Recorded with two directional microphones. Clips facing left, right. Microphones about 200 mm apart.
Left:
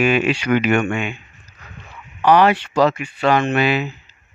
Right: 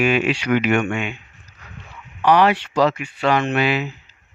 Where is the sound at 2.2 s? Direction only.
50° left (ahead or behind).